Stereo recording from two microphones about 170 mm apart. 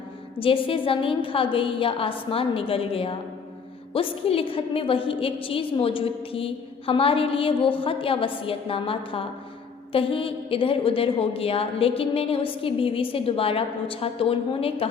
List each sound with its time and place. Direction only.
0.3 s a woman's voice: 30° left (ahead or behind)